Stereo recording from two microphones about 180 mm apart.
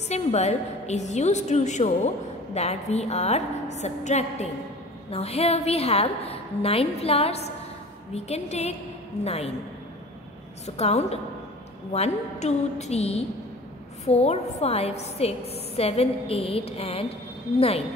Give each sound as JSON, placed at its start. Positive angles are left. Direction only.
{"t": 0.1, "sound": "a woman's voice", "side_deg": 35}
{"t": 10.8, "sound": "a woman's voice", "side_deg": 35}